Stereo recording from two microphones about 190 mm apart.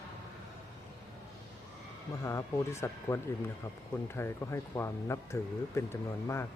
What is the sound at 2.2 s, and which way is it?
Speech, 15° left (ahead or behind).